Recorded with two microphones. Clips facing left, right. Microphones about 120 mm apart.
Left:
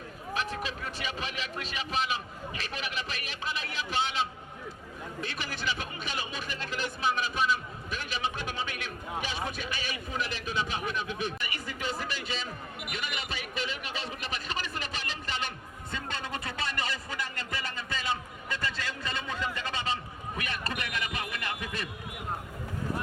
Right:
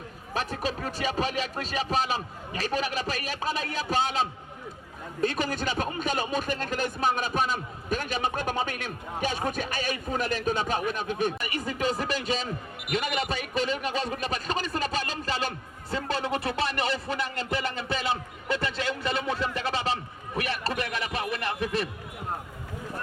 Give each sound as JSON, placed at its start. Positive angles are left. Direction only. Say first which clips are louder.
{"t": 0.3, "sound": "a man's voice", "louder": "right 4 dB", "side_deg": -40}